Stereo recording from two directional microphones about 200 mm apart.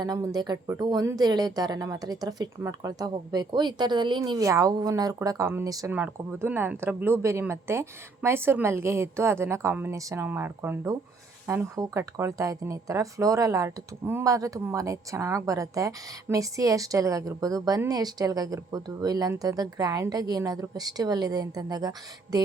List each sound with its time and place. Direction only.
0.0 s speech: 20° right (ahead or behind)